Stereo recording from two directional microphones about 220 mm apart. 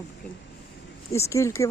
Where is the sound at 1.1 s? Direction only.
15° left (ahead or behind).